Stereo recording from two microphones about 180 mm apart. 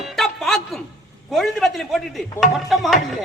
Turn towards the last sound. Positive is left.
turn(degrees=0)  # may be behind; listen again after turning